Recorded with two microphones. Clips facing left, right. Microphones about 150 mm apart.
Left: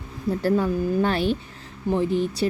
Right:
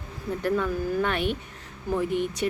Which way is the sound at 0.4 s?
30° left (ahead or behind).